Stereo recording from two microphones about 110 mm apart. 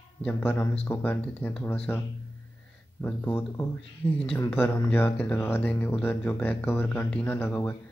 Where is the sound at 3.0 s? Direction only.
20° left (ahead or behind).